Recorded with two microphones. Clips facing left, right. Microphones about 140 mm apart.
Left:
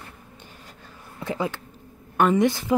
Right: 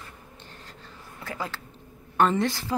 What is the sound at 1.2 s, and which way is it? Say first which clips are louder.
A woman's voice: left 7 dB; 20° left (ahead or behind).